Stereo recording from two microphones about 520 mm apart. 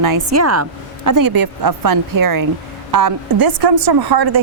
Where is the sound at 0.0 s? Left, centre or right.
Right.